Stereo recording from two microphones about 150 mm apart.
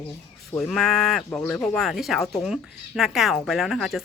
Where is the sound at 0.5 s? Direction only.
5° left (ahead or behind).